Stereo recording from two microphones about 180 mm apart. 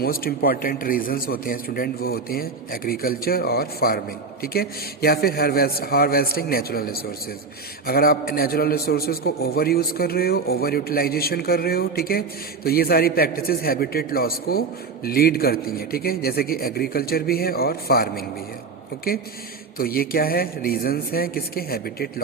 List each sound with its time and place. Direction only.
0.0 s a man's voice: 55° left (ahead or behind)
19.8 s a man's voice: 55° left (ahead or behind)